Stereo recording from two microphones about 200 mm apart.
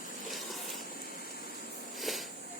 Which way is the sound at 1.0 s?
50° left (ahead or behind).